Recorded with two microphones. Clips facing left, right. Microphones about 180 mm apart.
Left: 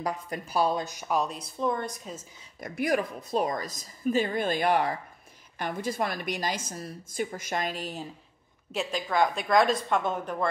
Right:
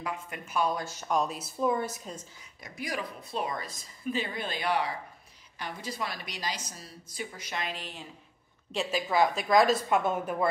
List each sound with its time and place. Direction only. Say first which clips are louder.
0.0 s speech: left 5 dB; 40° left (ahead or behind)
0.7 s a woman's voice: left 1 dB; 15° left (ahead or behind); by 2.1 s 5° right (ahead or behind)
2.6 s a woman's voice: left 9 dB; 55° left (ahead or behind)
8.7 s a woman's voice: even; 5° right (ahead or behind)